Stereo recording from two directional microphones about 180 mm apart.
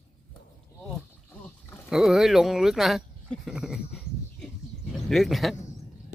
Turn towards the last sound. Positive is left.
turn(degrees=0)  # may be behind; listen again after turning